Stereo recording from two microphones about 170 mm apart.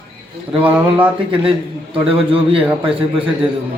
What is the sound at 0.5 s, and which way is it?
Speech, 10° right (ahead or behind).